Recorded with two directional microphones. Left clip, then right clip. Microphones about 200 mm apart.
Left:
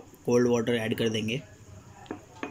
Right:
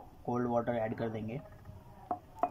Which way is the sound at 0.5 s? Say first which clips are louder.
Left 6 dB; 5° left (ahead or behind).